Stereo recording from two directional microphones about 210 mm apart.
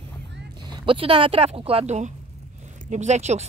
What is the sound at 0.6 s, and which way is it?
Speech, 25° right (ahead or behind).